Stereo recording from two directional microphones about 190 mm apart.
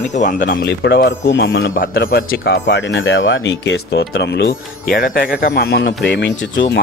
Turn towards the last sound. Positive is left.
turn(degrees=70)  # may be behind; listen again after turning